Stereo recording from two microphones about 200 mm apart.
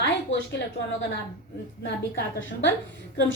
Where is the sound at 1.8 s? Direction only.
65° left (ahead or behind).